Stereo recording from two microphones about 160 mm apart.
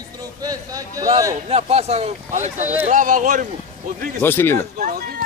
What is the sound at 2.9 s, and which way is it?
Speech, 55° right (ahead or behind).